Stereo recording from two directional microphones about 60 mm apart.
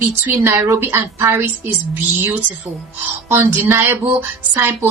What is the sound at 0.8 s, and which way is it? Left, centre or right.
Speech, right.